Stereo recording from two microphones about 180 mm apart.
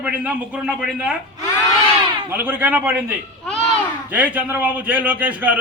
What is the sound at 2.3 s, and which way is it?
Speech, 10° right (ahead or behind).